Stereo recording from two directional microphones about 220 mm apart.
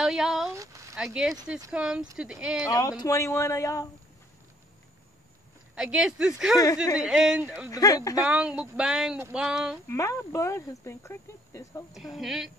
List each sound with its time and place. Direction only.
0.0 s speech: centre (ahead or behind)
0.6 s a sound: 15° right (ahead or behind)
0.9 s speech: 5° right (ahead or behind)
2.6 s speech: 15° left (ahead or behind)
5.8 s speech: 5° right (ahead or behind)
7.7 s speech: 15° left (ahead or behind)
8.3 s speech: 5° right (ahead or behind)
9.8 s speech: 15° left (ahead or behind)
11.9 s speech: centre (ahead or behind)